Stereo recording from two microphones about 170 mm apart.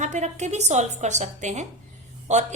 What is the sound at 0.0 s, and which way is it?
A woman's voice, 45° right (ahead or behind).